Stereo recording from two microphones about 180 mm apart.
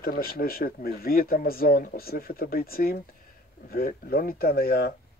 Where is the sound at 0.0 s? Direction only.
55° left (ahead or behind).